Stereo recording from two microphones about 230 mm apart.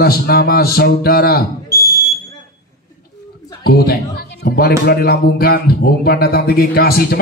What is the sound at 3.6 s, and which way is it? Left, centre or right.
A man's voice, left.